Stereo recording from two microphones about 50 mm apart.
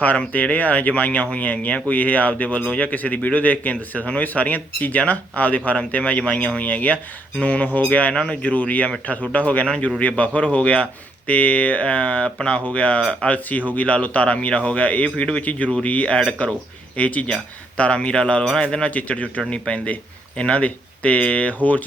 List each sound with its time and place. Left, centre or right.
0.0 s speech: left
8.1 s speech: centre
8.4 s speech: left